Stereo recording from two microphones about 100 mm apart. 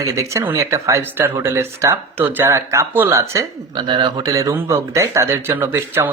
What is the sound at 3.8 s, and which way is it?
Speech, 50° right (ahead or behind).